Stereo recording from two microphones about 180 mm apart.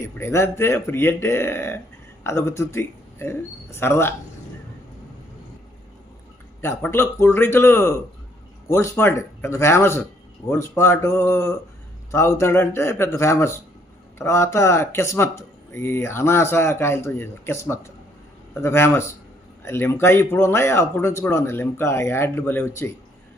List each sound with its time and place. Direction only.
0.0 s speech: 15° left (ahead or behind)
6.6 s speech: 15° left (ahead or behind)